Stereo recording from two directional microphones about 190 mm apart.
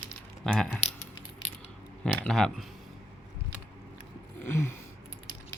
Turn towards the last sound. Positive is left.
turn(degrees=15)  # may be behind; listen again after turning